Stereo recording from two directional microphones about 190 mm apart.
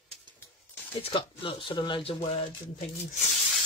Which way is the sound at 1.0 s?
30° left (ahead or behind).